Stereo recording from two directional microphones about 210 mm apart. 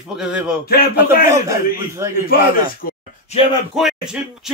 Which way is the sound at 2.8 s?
45° left (ahead or behind).